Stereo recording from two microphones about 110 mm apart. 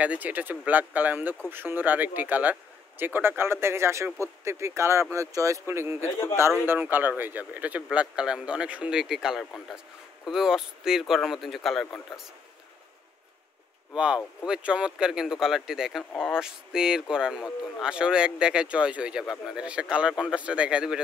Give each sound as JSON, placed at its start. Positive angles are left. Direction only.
{"t": 0.0, "sound": "speech", "side_deg": -15}
{"t": 13.9, "sound": "speech", "side_deg": -10}
{"t": 16.0, "sound": "speech", "side_deg": 15}
{"t": 16.3, "sound": "speech", "side_deg": -5}